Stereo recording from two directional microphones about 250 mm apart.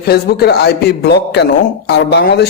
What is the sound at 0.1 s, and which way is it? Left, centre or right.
Speech, left.